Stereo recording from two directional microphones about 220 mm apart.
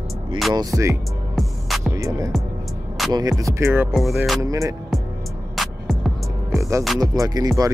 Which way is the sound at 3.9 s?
Centre (ahead or behind).